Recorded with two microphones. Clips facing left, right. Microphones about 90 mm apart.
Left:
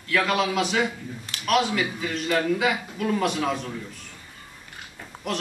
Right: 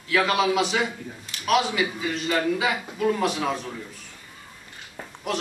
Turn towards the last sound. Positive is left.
turn(degrees=0)  # may be behind; listen again after turning